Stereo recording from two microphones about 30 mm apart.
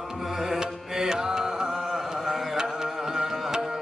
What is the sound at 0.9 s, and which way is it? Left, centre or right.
Mantra, centre.